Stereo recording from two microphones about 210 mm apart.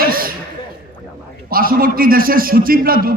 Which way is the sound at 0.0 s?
45° right (ahead or behind).